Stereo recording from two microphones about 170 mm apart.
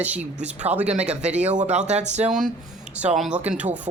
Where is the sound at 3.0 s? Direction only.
5° right (ahead or behind).